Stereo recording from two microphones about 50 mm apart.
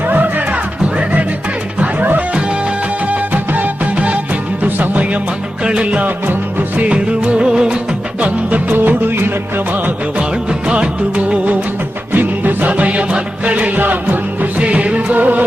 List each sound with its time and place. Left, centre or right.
0.1 s music: right
3.1 s music: right
5.6 s music of bollywood: right
8.2 s music: right
10.7 s music of bollywood: right
12.1 s music: right
14.6 s music: right